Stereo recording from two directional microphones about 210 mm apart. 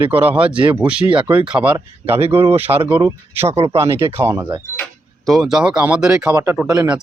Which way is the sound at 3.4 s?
30° right (ahead or behind).